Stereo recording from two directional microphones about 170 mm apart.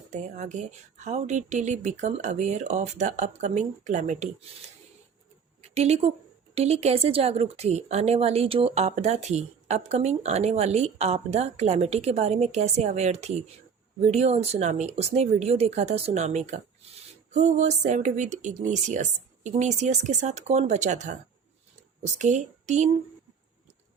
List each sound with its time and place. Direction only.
0.1 s speech: 45° right (ahead or behind)
5.6 s speech: 40° right (ahead or behind)